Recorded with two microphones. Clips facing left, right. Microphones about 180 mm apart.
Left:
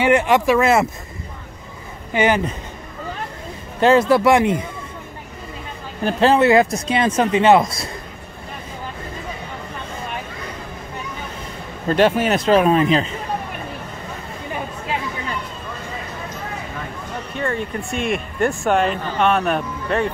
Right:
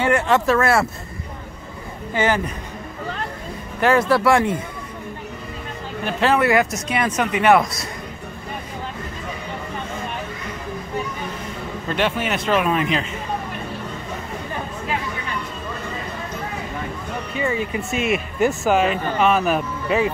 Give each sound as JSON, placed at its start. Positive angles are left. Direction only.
{"t": 0.0, "sound": "speech", "side_deg": 15}
{"t": 2.1, "sound": "speech", "side_deg": 20}
{"t": 3.8, "sound": "speech", "side_deg": 20}
{"t": 6.0, "sound": "speech", "side_deg": 30}
{"t": 11.9, "sound": "speech", "side_deg": 40}
{"t": 17.4, "sound": "speech", "side_deg": -5}